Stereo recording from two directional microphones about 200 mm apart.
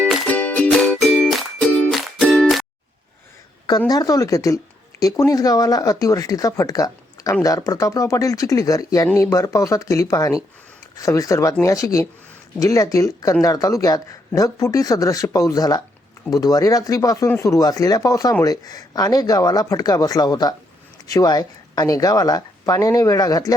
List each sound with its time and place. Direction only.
0.0 s music: 5° left (ahead or behind)
3.7 s speech: 20° left (ahead or behind)